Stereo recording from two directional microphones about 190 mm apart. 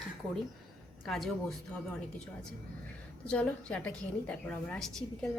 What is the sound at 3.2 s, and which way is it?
A woman's voice, 5° left (ahead or behind).